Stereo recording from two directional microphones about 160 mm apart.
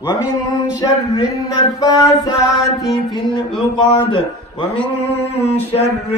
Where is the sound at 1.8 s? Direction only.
25° left (ahead or behind).